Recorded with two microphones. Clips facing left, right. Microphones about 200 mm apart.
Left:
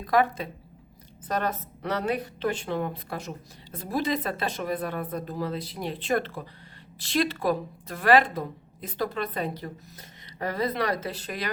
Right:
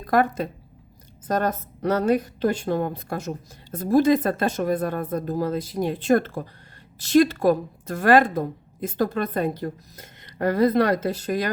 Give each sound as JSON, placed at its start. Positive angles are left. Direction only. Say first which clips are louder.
{"t": 0.0, "sound": "a woman's voice", "louder": "right 3 dB", "side_deg": -45}